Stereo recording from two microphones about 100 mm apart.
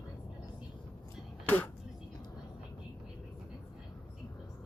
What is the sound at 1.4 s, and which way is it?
Music, 20° left (ahead or behind).